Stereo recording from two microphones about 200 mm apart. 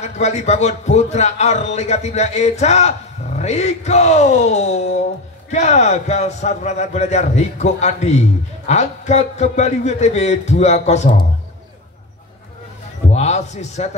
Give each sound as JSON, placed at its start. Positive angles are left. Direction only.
{"t": 0.0, "sound": "a man's voice", "side_deg": 35}
{"t": 13.1, "sound": "a man's voice", "side_deg": 35}